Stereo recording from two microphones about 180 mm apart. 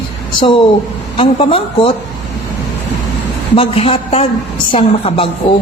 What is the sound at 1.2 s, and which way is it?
Speech, 30° left (ahead or behind).